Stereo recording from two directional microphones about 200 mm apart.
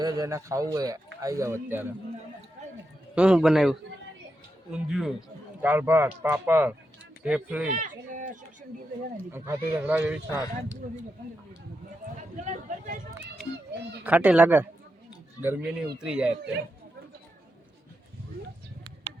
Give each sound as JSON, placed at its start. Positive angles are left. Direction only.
{"t": 0.0, "sound": "a man's voice", "side_deg": -20}
{"t": 3.2, "sound": "a man's voice", "side_deg": -5}
{"t": 7.7, "sound": "a sound", "side_deg": -40}
{"t": 9.3, "sound": "a man's voice", "side_deg": -10}
{"t": 12.5, "sound": "a sound", "side_deg": -35}
{"t": 14.0, "sound": "a man's voice", "side_deg": -5}